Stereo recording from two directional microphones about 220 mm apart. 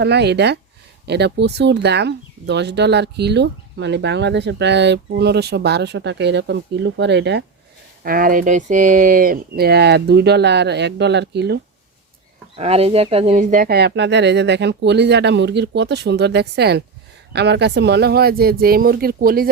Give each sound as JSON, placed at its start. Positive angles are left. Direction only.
{"t": 0.0, "sound": "speech", "side_deg": -50}
{"t": 8.0, "sound": "speech", "side_deg": -40}
{"t": 12.5, "sound": "speech", "side_deg": -30}